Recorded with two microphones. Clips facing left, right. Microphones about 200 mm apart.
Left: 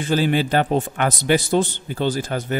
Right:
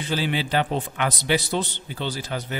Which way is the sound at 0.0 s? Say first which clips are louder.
Left 6 dB; 50° left (ahead or behind).